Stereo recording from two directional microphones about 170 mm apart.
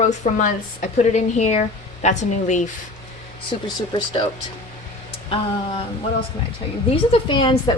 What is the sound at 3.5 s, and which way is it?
Speech, 35° left (ahead or behind).